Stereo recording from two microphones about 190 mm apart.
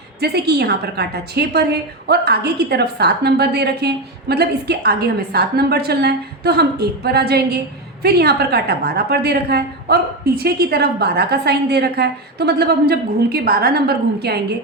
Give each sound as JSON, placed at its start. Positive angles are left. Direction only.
{"t": 0.2, "sound": "a woman's voice", "side_deg": -55}